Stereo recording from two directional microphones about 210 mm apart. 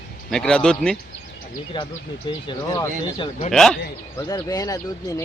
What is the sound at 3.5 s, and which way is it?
Speech, 5° left (ahead or behind).